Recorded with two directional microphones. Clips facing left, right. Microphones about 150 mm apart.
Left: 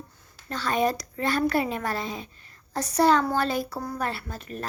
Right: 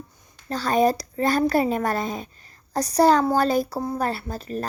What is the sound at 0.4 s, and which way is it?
Speech, 35° right (ahead or behind).